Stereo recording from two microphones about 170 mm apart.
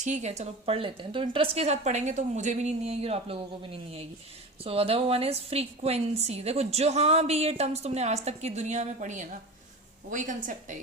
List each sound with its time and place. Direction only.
0.0 s a woman's voice: 45° right (ahead or behind)